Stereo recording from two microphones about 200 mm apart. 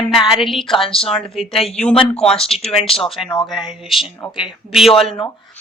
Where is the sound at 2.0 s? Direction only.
30° left (ahead or behind).